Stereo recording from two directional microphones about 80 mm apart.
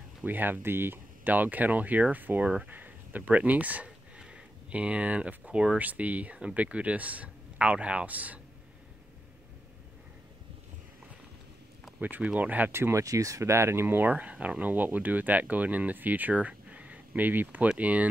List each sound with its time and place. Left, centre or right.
0.2 s speech: right
12.0 s speech: centre
13.0 s speech: right; by 18.0 s centre